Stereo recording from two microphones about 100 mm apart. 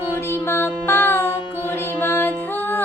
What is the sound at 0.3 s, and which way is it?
Music, 25° left (ahead or behind).